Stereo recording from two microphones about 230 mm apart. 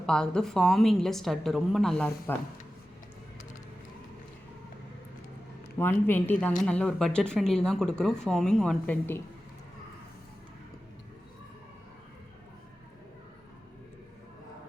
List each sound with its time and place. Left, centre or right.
0.0 s speech: centre
5.8 s speech: centre